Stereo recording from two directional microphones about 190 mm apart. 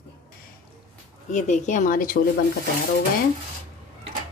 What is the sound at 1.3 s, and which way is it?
Speech, 40° left (ahead or behind).